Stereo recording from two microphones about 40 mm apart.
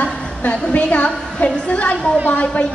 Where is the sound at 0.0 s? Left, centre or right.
Left.